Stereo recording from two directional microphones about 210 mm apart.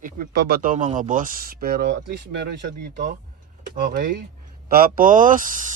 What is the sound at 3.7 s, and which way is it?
A man's voice, 45° right (ahead or behind).